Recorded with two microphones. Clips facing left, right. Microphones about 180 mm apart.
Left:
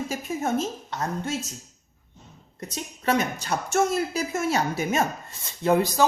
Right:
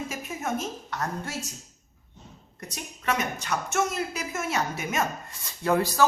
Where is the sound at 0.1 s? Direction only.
30° left (ahead or behind).